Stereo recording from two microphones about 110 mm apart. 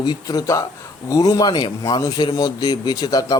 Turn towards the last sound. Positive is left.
turn(degrees=35)  # may be behind; listen again after turning